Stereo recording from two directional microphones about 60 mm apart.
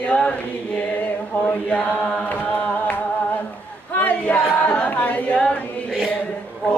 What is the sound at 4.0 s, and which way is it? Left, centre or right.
Choir, left.